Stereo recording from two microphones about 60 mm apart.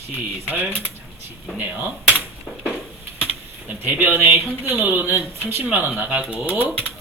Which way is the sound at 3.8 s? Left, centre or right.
Right.